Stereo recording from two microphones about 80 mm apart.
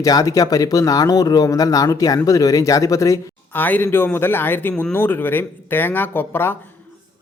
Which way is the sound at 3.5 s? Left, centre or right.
Left.